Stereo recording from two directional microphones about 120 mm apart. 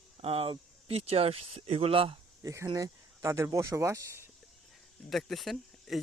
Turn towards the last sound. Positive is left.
turn(degrees=0)  # may be behind; listen again after turning